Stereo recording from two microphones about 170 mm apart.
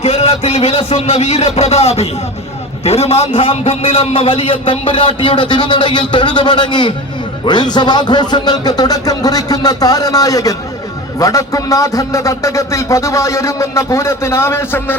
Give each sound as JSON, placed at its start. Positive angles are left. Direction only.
{"t": 0.0, "sound": "a man's voice", "side_deg": 35}